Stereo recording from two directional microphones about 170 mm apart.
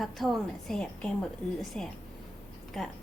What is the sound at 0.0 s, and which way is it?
A woman's voice, centre (ahead or behind).